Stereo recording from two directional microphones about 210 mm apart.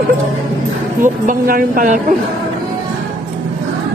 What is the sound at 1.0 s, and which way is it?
Music, 40° right (ahead or behind).